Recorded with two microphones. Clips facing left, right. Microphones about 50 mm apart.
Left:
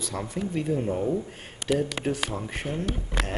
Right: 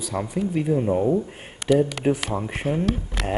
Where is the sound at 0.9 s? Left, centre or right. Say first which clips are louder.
Right 6 dB; right.